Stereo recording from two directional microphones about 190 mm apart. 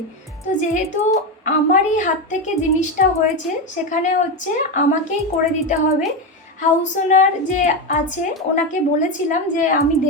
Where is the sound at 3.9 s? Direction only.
40° left (ahead or behind).